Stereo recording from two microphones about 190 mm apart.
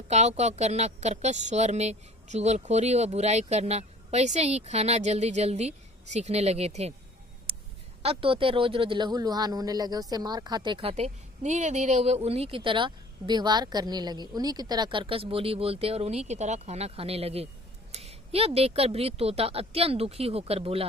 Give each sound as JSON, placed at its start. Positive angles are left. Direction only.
{"t": 0.1, "sound": "a woman's voice", "side_deg": -35}
{"t": 7.5, "sound": "a sound", "side_deg": -30}
{"t": 8.0, "sound": "a woman's voice", "side_deg": -30}